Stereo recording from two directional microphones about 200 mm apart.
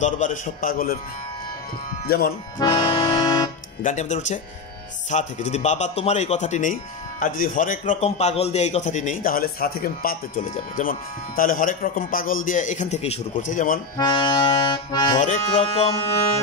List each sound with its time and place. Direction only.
0.0 s a man's voice: 40° left (ahead or behind)
2.0 s a man's voice: 50° left (ahead or behind)
2.6 s accordion: 20° left (ahead or behind)
3.8 s speech: 35° left (ahead or behind)
13.9 s accordion: 20° left (ahead or behind)
15.1 s speech: 40° left (ahead or behind)
15.5 s accordion: 30° left (ahead or behind)